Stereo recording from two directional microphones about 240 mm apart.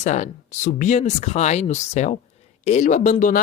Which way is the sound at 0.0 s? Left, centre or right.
Left.